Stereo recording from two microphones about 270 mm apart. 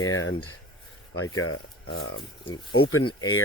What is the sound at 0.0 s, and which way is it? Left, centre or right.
Speech, left.